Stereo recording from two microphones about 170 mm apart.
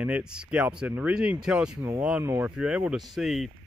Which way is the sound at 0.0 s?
5° right (ahead or behind).